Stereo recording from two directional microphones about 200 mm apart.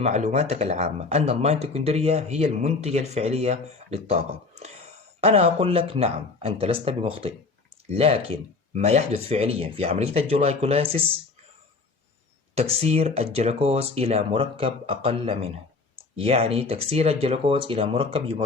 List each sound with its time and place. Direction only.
0.0 s speech: 35° right (ahead or behind)
12.5 s speech: 30° right (ahead or behind)